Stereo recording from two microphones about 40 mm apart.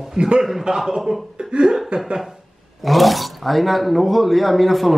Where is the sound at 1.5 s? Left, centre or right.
Right.